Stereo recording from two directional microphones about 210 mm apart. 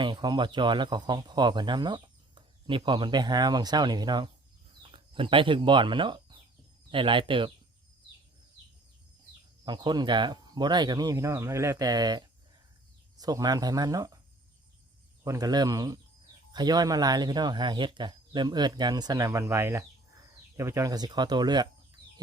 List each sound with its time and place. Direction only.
0.0 s speech: 20° right (ahead or behind)
9.6 s speech: 20° right (ahead or behind)
15.2 s speech: 15° right (ahead or behind)